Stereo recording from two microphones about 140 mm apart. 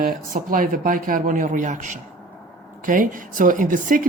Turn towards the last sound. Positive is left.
turn(degrees=-75)  # may be behind; listen again after turning